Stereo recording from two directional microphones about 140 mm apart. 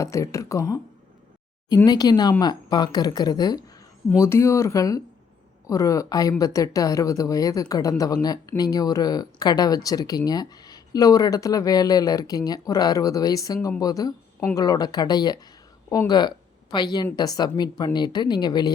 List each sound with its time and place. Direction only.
0.0 s a woman's voice: 20° left (ahead or behind)